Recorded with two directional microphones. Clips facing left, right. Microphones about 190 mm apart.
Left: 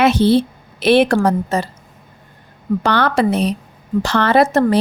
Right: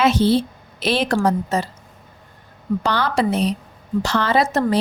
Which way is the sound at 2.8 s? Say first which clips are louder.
Left 4 dB; 60° left (ahead or behind).